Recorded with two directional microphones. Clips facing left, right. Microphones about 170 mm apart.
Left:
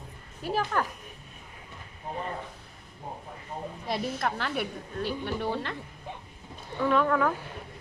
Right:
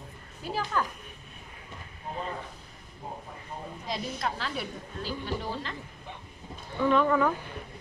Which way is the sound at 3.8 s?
60° left (ahead or behind).